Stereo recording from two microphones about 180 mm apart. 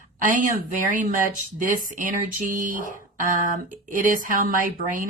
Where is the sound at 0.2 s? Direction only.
45° right (ahead or behind).